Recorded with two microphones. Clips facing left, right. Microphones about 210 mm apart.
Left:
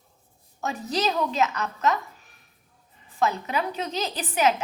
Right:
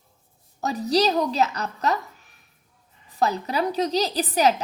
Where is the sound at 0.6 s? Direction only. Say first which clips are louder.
Right 5 dB; 35° right (ahead or behind).